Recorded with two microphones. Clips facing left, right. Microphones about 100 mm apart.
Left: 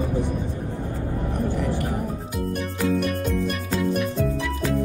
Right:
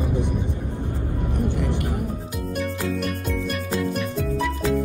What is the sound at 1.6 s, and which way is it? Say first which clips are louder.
Music: left 1 dB; 20° right (ahead or behind).